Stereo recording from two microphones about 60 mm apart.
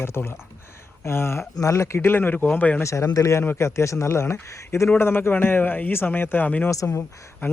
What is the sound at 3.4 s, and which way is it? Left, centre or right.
Speech, left.